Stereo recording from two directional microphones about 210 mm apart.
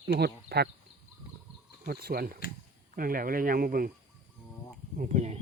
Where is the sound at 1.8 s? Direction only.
45° right (ahead or behind).